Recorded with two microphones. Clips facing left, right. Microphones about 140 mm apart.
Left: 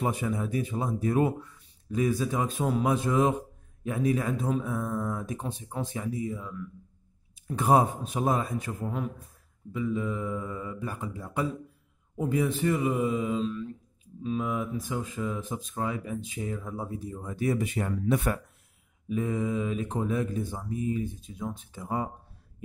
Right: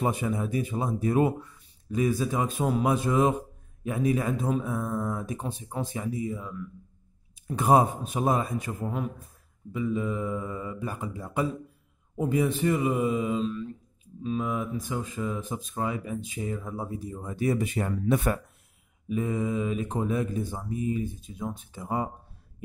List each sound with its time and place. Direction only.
0.0 s speech: 20° right (ahead or behind)
19.0 s speech: 5° right (ahead or behind)